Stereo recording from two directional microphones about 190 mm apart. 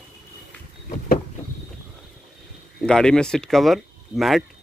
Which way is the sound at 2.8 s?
5° left (ahead or behind).